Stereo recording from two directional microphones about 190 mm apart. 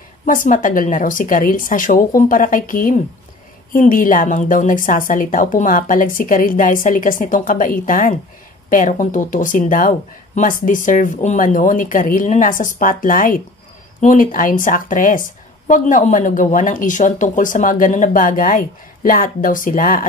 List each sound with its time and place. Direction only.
0.2 s a woman's voice: 45° left (ahead or behind)